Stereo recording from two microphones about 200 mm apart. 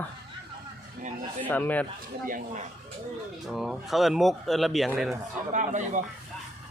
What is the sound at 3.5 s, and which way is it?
Speech, centre (ahead or behind).